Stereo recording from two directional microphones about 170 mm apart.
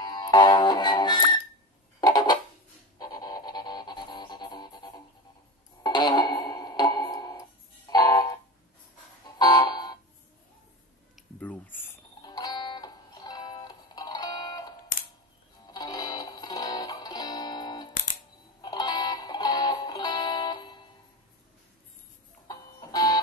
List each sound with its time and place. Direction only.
0.0 s music: 25° left (ahead or behind)
2.0 s a sound: 25° left (ahead or behind)
3.0 s music: 20° left (ahead or behind)
9.4 s a sound: 25° left (ahead or behind)
11.3 s a sound: 10° left (ahead or behind)
12.2 s music: 25° left (ahead or behind)
14.9 s music: 55° left (ahead or behind)
15.6 s music: 25° left (ahead or behind)
22.5 s music: 20° left (ahead or behind)